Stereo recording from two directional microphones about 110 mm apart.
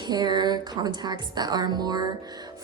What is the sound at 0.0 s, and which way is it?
A woman's voice, 40° right (ahead or behind).